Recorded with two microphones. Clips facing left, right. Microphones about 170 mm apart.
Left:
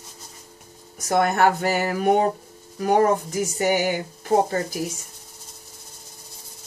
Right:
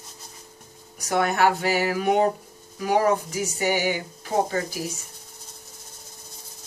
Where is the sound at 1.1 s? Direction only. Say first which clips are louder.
Left 2 dB; 45° left (ahead or behind).